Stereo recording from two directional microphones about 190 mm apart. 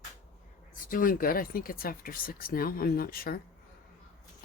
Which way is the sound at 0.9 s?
45° left (ahead or behind).